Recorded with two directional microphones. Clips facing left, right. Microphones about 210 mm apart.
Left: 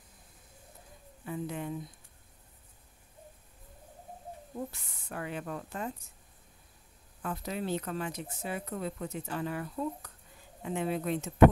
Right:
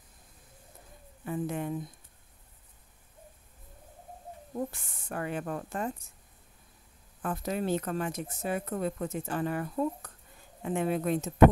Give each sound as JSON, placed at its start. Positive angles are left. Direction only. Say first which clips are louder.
{"t": 1.2, "sound": "a woman's voice", "louder": "right 4 dB", "side_deg": -50}
{"t": 4.6, "sound": "speech", "louder": "right 4 dB", "side_deg": -50}
{"t": 7.2, "sound": "speech", "louder": "right 4 dB", "side_deg": -45}